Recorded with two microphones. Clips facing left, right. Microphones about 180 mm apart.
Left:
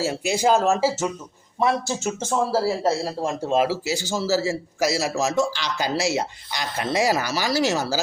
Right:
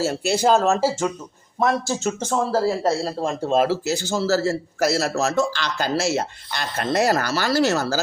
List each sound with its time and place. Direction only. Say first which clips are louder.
0.0 s speech: right 2 dB; 10° left (ahead or behind)
2.2 s speech: even; 10° left (ahead or behind)